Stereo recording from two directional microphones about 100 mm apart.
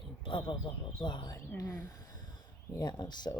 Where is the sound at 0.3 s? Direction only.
55° left (ahead or behind).